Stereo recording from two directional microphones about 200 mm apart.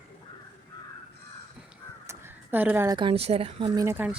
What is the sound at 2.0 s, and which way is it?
A woman's voice, 10° right (ahead or behind).